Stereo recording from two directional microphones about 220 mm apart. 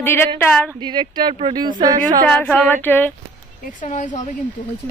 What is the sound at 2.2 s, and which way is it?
Speech, 5° left (ahead or behind).